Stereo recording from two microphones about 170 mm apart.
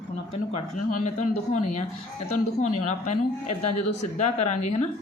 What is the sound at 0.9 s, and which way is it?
A woman's voice, 45° left (ahead or behind).